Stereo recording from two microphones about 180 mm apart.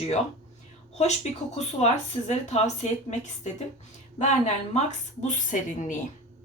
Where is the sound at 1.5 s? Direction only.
40° left (ahead or behind).